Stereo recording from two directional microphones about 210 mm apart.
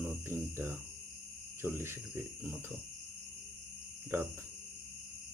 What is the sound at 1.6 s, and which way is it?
Cricket, 10° right (ahead or behind).